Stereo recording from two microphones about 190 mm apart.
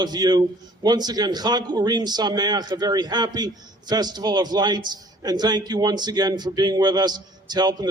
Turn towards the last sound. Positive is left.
turn(degrees=-20)  # may be behind; listen again after turning